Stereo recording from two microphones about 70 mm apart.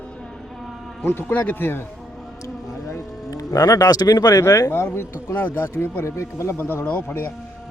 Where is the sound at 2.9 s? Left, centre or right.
Left.